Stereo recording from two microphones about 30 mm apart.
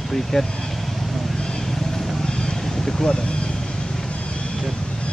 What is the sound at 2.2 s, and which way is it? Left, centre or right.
Boat, left.